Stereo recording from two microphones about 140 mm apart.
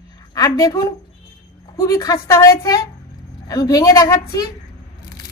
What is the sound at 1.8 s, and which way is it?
A woman's voice, 25° left (ahead or behind).